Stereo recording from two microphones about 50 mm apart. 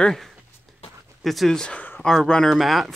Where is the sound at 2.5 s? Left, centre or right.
Centre.